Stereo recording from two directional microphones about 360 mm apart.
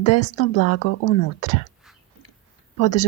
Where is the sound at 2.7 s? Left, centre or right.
Left.